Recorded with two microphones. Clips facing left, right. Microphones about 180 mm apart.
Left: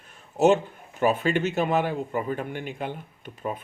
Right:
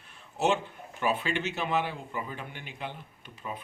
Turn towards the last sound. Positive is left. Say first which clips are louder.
# left 7 dB
turn(degrees=50)  # may be behind; listen again after turning